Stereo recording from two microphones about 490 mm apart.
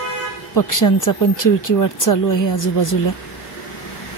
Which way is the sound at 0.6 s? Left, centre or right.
Left.